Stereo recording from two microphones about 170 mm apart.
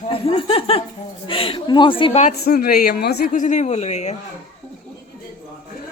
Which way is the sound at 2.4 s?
65° left (ahead or behind).